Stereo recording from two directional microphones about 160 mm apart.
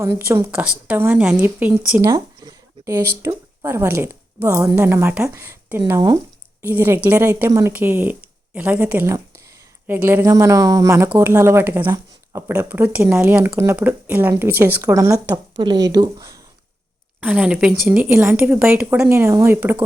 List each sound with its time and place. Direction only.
0.0 s a woman's voice: 15° right (ahead or behind)
2.0 s a woman's voice: 20° right (ahead or behind)
17.2 s a woman's voice: 10° right (ahead or behind)